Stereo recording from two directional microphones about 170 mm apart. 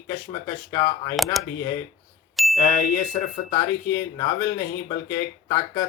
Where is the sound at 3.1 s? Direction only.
40° left (ahead or behind).